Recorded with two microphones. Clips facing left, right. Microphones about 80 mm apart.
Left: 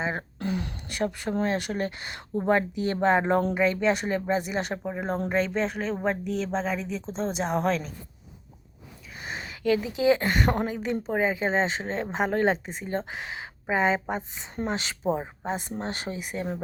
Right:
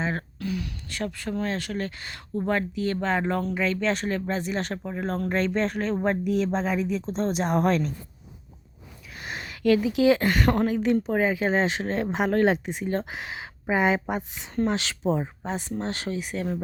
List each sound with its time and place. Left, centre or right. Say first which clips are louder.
0.0 s speech: right 1 dB; centre
0.3 s a sound: left 1 dB; left
0.9 s speech: left 3 dB; centre
5.3 s speech: right 2 dB; centre
9.1 s a sound: even; centre
10.0 s speech: right 1 dB; centre
10.2 s speech: right 3 dB; centre
14.5 s speech: right 4 dB; centre
16.3 s speech: even; left